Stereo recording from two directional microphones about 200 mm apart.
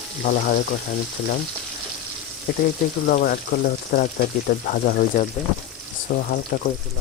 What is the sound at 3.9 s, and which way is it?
Speech, 50° left (ahead or behind).